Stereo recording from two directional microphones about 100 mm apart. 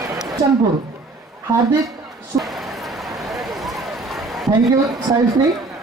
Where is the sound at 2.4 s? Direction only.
Centre (ahead or behind).